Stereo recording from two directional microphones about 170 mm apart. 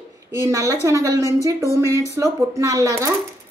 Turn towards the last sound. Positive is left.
turn(degrees=-15)  # may be behind; listen again after turning